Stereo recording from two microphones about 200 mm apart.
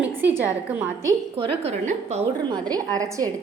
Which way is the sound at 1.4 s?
30° right (ahead or behind).